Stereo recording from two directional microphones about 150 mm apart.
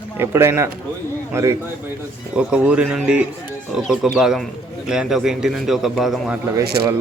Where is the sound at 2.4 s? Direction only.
10° right (ahead or behind).